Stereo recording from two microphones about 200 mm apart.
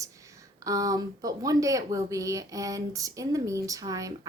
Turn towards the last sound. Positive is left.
turn(degrees=-15)  # may be behind; listen again after turning